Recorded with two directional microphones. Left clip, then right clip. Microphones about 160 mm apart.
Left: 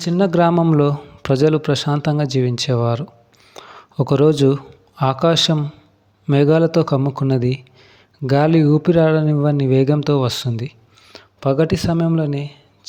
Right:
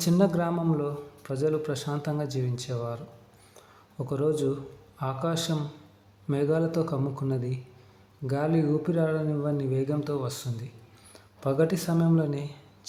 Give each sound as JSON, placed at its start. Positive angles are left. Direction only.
{"t": 0.2, "sound": "a man's voice", "side_deg": 50}
{"t": 0.8, "sound": "speech", "side_deg": 65}
{"t": 3.5, "sound": "a sound", "side_deg": 60}
{"t": 4.9, "sound": "a man's voice", "side_deg": 55}